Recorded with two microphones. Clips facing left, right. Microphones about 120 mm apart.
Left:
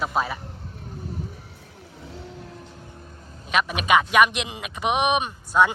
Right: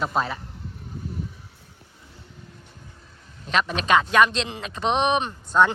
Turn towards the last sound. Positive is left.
turn(degrees=10)  # may be behind; listen again after turning